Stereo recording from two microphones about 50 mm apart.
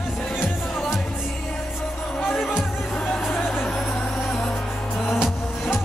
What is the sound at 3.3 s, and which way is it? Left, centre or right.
Music, left.